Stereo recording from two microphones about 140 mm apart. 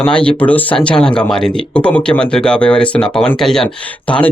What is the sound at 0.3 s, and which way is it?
Speech, 10° left (ahead or behind).